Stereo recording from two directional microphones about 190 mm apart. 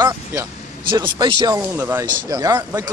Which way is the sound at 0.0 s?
20° right (ahead or behind).